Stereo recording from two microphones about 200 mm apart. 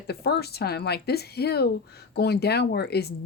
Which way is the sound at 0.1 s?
55° left (ahead or behind).